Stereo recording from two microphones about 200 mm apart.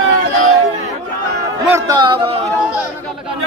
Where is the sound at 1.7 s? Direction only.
15° right (ahead or behind).